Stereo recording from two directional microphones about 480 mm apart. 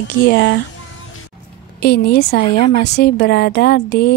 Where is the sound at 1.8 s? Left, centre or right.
Centre.